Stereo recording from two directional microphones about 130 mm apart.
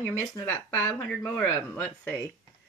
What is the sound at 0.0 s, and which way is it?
Speech, 15° left (ahead or behind).